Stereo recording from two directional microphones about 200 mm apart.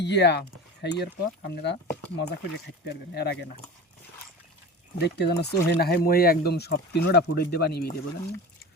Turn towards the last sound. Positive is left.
turn(degrees=50)  # may be behind; listen again after turning